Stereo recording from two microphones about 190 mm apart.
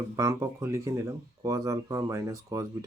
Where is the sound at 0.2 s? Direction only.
15° right (ahead or behind).